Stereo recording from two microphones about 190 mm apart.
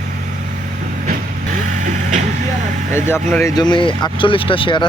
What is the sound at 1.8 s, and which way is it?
Vehicle, 40° right (ahead or behind).